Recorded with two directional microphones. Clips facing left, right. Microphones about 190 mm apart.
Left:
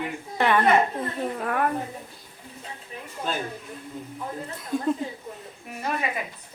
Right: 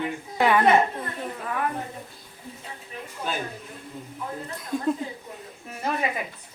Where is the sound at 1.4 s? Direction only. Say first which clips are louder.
Left 3 dB; 50° left (ahead or behind).